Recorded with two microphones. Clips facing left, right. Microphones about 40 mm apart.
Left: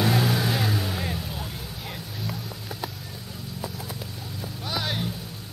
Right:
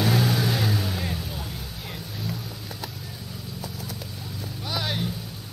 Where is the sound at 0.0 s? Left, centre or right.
Centre.